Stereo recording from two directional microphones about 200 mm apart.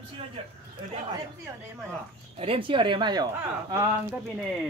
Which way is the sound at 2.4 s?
25° right (ahead or behind).